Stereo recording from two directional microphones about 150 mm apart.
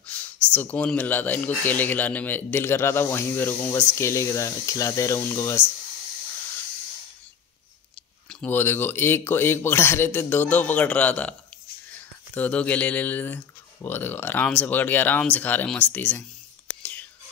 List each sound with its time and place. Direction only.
0.0 s speech: 10° left (ahead or behind)
8.3 s speech: 10° left (ahead or behind)
12.4 s speech: 10° left (ahead or behind)